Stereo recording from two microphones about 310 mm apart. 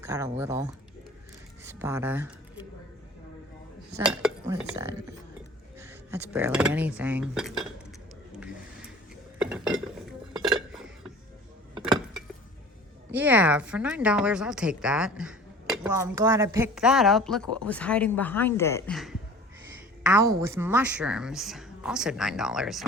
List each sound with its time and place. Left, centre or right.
0.0 s cutlery: centre
1.6 s speech: centre
3.9 s cutlery: centre
5.8 s a woman's voice: centre
9.4 s a sound: centre
10.7 s dishes: centre
13.1 s a woman's voice: centre
20.1 s a woman's voice: centre